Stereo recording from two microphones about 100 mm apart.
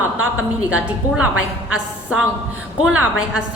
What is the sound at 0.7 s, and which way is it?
A woman's voice, 10° right (ahead or behind).